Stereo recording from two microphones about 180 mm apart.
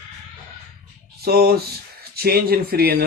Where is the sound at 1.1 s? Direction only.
60° right (ahead or behind).